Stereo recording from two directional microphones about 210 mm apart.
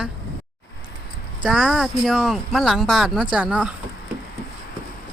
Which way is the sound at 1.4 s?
Centre (ahead or behind).